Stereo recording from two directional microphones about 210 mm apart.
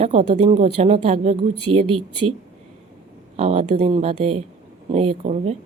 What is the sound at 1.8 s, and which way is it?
Speech, 90° right.